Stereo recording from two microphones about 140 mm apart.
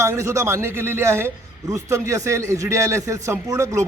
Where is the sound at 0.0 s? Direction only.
20° right (ahead or behind).